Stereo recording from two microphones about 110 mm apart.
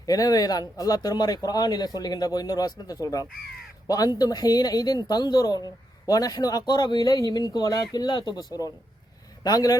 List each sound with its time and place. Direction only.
0.0 s speech: 35° left (ahead or behind)